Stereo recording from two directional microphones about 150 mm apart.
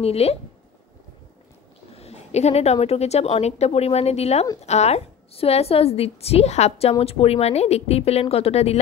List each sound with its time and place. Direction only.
0.0 s a woman's voice: 45° left (ahead or behind)
2.0 s a woman's voice: 45° left (ahead or behind)